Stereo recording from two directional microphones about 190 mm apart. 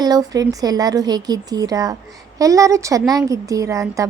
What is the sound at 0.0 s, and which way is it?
A woman's voice, 20° right (ahead or behind).